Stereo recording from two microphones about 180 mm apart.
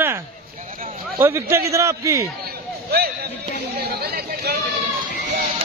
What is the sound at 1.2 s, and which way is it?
A man's voice, 15° right (ahead or behind).